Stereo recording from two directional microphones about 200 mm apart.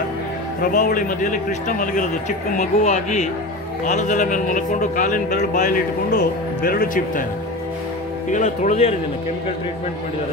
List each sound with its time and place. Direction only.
0.6 s speech: 40° left (ahead or behind)
8.3 s speech: 40° left (ahead or behind)